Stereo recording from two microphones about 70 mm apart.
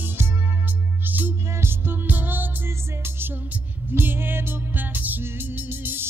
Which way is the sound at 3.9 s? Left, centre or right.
Right.